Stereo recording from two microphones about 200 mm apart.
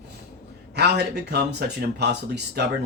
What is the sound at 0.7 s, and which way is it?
Speech, 55° right (ahead or behind).